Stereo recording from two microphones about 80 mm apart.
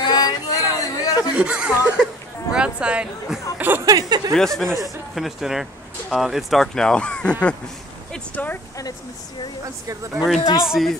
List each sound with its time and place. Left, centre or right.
0.0 s a sound: left
1.3 s speech: centre
3.5 s speech: right
3.8 s speech: right
4.3 s speech: centre
8.4 s speech: centre
10.1 s speech: centre